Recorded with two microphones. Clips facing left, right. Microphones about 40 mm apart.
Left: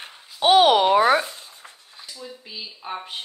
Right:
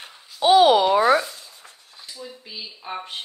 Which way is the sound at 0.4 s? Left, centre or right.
Left.